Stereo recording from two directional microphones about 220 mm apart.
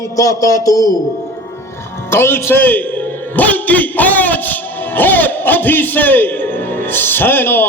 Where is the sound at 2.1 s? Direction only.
10° left (ahead or behind).